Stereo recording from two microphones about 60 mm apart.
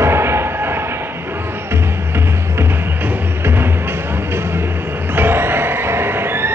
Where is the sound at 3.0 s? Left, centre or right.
Right.